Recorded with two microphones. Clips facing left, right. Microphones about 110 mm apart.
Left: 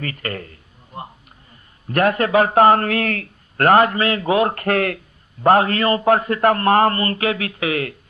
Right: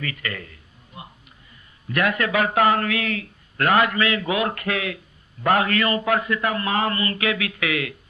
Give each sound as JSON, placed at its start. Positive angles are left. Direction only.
{"t": 0.0, "sound": "a sound", "side_deg": 40}
{"t": 1.9, "sound": "speech", "side_deg": 40}
{"t": 5.4, "sound": "speech", "side_deg": 35}